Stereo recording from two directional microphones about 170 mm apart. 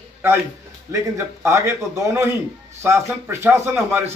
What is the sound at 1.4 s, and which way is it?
A man's voice, 20° right (ahead or behind).